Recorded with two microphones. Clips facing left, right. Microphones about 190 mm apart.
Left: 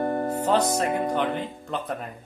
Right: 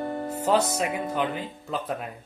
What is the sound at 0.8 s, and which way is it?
Speech, 45° left (ahead or behind).